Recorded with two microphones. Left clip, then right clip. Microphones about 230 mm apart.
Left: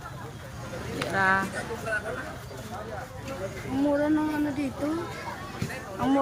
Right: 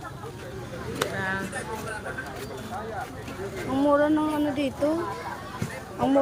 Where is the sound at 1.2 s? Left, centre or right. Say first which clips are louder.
Left 11 dB; left.